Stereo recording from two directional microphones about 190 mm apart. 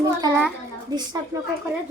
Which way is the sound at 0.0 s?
20° right (ahead or behind).